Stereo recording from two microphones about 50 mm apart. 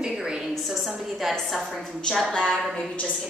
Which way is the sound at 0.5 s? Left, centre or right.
Centre.